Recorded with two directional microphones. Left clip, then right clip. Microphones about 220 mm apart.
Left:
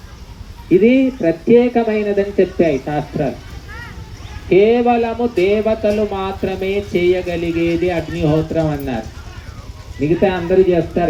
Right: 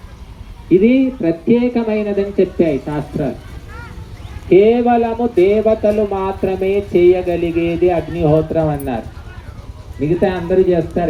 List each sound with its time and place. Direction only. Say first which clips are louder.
0.7 s speech: even; 45° right (ahead or behind)
4.4 s speech: right 1 dB; 50° right (ahead or behind); by 9.0 s 35° right (ahead or behind)
10.0 s speech: left 1 dB; 25° right (ahead or behind)